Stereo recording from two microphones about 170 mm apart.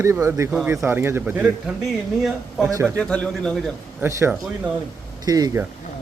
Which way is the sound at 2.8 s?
5° left (ahead or behind).